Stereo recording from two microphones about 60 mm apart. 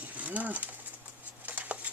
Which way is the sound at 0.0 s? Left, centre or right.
Right.